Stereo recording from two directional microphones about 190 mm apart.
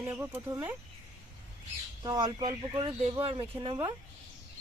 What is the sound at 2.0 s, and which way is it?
Speech, 20° right (ahead or behind).